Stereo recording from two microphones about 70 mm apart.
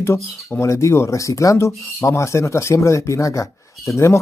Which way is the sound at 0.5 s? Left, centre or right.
Left.